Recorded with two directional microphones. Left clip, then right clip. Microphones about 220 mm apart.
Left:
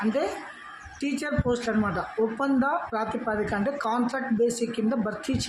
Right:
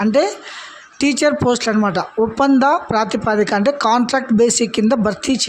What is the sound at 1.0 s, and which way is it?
Speech, 45° right (ahead or behind).